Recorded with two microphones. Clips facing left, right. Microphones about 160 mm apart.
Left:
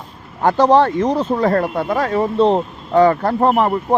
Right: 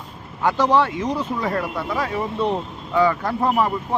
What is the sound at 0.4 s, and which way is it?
Speech, 40° left (ahead or behind).